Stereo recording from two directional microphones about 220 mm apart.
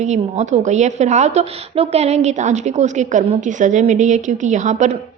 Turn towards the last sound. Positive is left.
turn(degrees=-35)  # may be behind; listen again after turning